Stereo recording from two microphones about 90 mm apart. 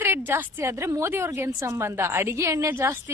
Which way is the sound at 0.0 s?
25° right (ahead or behind).